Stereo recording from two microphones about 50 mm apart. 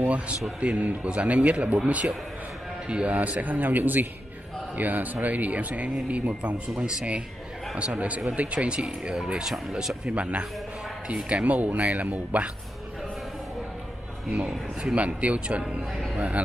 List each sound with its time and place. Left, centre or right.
0.0 s a man's voice: right
10.1 s a man's voice: right
14.3 s a man's voice: right